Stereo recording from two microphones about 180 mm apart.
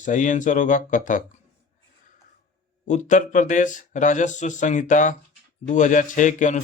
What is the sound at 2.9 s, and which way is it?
Speech, 45° left (ahead or behind).